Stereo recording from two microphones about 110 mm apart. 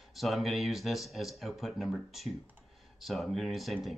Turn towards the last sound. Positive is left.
turn(degrees=0)  # may be behind; listen again after turning